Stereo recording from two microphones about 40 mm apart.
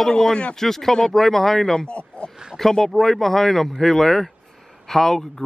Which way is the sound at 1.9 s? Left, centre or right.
Left.